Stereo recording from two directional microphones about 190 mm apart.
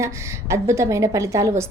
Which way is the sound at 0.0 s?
15° right (ahead or behind).